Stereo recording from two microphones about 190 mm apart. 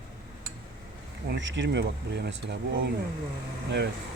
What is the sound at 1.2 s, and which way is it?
Speech, 70° right (ahead or behind).